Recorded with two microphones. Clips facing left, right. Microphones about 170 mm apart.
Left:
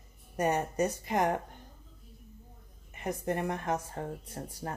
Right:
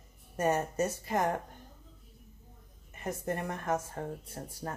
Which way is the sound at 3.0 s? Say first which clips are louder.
Left 2 dB; 15° left (ahead or behind).